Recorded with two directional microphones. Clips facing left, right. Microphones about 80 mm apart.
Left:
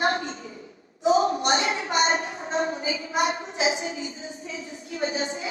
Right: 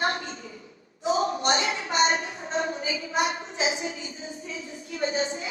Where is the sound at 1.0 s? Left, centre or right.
Left.